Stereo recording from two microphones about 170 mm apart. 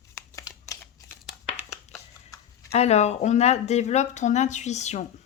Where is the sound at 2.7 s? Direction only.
40° left (ahead or behind).